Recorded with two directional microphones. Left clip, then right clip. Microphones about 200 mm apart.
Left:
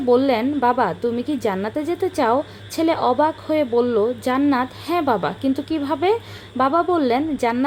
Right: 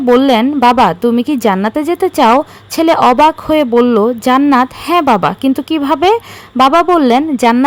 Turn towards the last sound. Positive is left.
turn(degrees=-35)  # may be behind; listen again after turning